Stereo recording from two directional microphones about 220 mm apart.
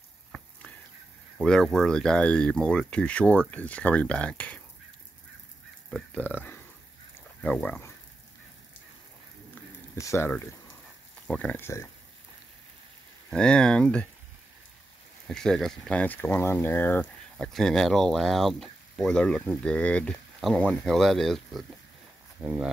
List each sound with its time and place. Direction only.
1.4 s speech: centre (ahead or behind)
5.9 s speech: 5° left (ahead or behind)
9.9 s speech: 10° left (ahead or behind)
13.3 s speech: 5° left (ahead or behind)
15.2 s speech: centre (ahead or behind)